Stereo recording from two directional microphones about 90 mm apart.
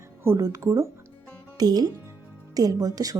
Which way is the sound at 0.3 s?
40° right (ahead or behind).